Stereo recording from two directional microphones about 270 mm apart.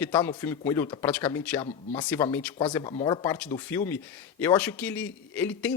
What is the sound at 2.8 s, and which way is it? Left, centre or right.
Speech, centre.